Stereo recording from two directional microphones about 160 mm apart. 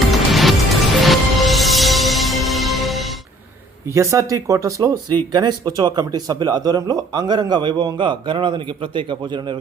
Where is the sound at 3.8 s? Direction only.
20° right (ahead or behind).